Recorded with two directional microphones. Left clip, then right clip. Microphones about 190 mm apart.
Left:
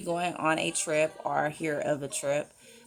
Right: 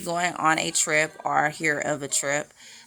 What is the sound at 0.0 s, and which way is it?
Speech, 25° right (ahead or behind).